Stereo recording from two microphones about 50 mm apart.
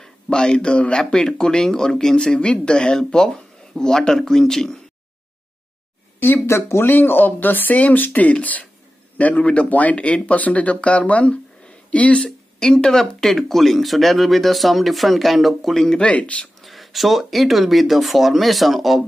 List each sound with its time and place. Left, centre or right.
0.0 s speech: centre
6.1 s a sound: left
6.4 s speech: left
6.9 s speech: left; by 15.7 s centre
15.7 s speech: centre
16.0 s speech: left
16.6 s speech: centre